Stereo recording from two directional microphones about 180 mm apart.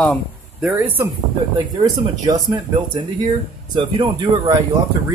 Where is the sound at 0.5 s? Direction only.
5° right (ahead or behind).